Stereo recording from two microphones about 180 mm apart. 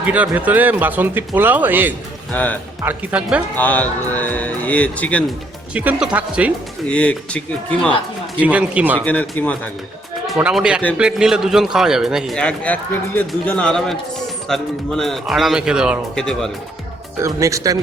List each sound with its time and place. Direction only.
0.0 s speech: 10° right (ahead or behind)
2.3 s speech: 10° left (ahead or behind)
2.8 s speech: 10° right (ahead or behind)
3.6 s speech: 10° left (ahead or behind)
5.7 s speech: 10° right (ahead or behind)
6.8 s speech: 5° left (ahead or behind)
8.4 s speech: 5° right (ahead or behind)
9.0 s a man's voice: 5° left (ahead or behind)
17.2 s speech: 15° right (ahead or behind)